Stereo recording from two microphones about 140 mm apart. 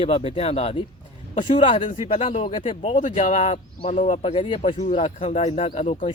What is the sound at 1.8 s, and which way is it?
Speech, 60° left (ahead or behind).